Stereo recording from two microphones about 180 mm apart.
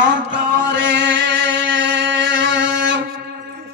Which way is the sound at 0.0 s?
90° right.